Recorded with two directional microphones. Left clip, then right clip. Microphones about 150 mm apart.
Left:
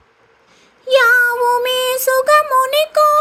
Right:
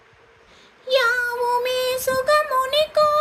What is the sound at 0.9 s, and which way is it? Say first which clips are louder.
Music: left 8 dB; 50° left (ahead or behind).